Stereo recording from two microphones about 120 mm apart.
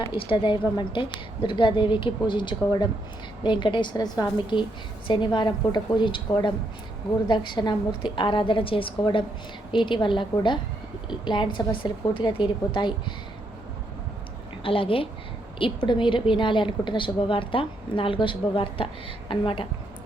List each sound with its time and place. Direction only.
0.1 s a woman's voice: 45° left (ahead or behind)
14.6 s a woman's voice: 50° left (ahead or behind)